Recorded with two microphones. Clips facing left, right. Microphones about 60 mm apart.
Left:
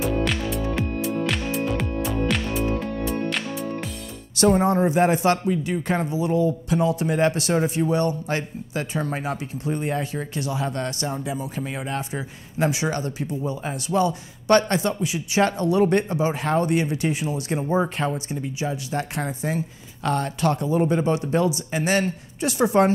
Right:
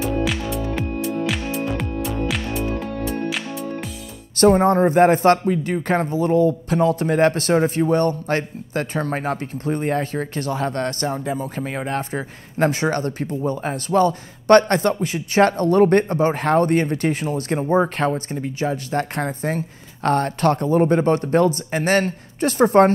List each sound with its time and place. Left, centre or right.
0.0 s music: centre
4.4 s a man's voice: right